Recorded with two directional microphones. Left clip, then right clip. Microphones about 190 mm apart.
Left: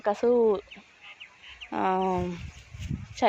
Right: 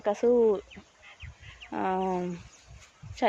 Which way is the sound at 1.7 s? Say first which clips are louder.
Left 3 dB; 20° left (ahead or behind).